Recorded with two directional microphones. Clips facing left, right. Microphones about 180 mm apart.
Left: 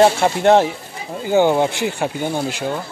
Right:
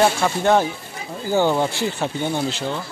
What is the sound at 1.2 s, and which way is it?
Speech, 15° left (ahead or behind).